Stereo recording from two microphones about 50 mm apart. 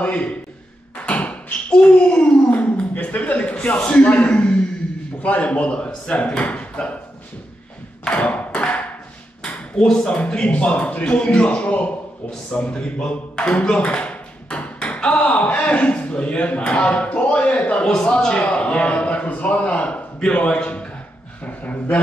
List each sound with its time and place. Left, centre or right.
0.0 s speech: left
1.0 s a sound: left
5.2 s speech: left
8.0 s tap: left
9.4 s speech: centre